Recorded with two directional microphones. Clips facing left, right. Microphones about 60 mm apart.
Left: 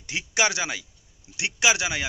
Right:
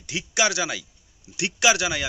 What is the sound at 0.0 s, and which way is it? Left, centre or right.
Speech, left.